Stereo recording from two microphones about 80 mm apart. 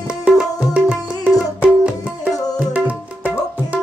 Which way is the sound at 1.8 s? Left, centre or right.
Centre.